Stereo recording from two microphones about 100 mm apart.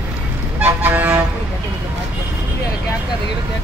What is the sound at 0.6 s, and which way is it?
Vehicle, 15° right (ahead or behind).